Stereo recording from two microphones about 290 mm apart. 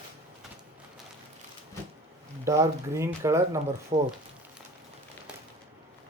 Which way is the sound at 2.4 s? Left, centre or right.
Centre.